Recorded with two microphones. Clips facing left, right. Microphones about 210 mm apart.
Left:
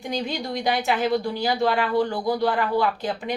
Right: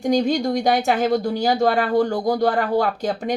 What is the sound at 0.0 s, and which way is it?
Speech, 45° right (ahead or behind).